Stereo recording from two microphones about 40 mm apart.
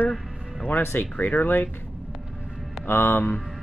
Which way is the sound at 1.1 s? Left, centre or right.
Left.